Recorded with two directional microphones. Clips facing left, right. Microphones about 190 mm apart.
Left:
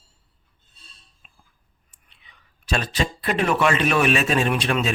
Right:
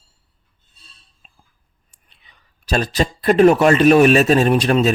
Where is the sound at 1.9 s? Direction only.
40° right (ahead or behind).